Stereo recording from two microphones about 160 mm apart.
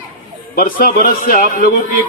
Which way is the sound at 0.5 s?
60° left (ahead or behind).